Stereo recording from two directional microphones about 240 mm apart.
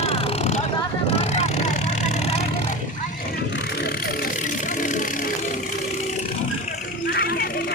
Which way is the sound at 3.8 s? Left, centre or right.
Left.